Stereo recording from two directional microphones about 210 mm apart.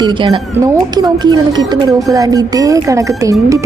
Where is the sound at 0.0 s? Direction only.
20° right (ahead or behind).